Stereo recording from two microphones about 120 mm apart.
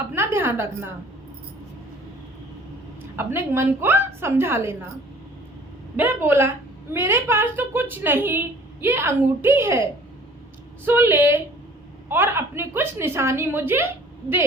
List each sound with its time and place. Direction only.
0.1 s a woman's voice: 20° right (ahead or behind)
3.2 s a woman's voice: 20° right (ahead or behind)
6.0 s a woman's voice: 20° right (ahead or behind)